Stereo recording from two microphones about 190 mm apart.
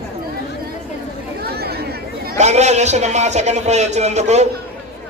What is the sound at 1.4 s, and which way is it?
Chatter, 55° right (ahead or behind).